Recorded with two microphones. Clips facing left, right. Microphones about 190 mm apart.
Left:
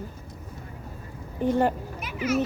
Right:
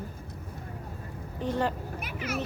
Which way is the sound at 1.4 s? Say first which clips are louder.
Left 6 dB; 45° left (ahead or behind).